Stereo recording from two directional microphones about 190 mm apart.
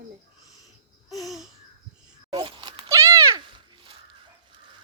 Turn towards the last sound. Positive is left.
turn(degrees=-25)  # may be behind; listen again after turning